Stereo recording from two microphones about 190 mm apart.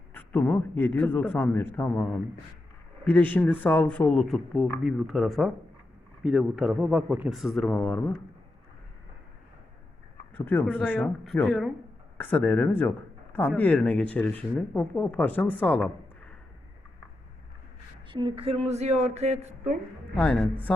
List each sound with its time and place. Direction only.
0.1 s a man's voice: 10° left (ahead or behind)
10.3 s a man's voice: 10° left (ahead or behind)
18.1 s speech: 25° right (ahead or behind)
20.1 s a man's voice: 5° left (ahead or behind)